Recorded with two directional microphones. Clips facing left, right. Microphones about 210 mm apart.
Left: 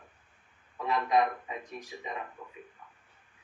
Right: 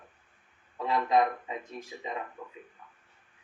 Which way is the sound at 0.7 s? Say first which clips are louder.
Right 1 dB; 25° right (ahead or behind).